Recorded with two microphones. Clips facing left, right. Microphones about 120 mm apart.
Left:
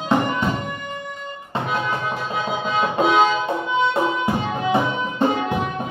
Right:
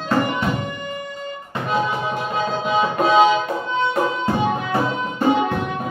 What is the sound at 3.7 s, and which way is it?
Music, 15° left (ahead or behind).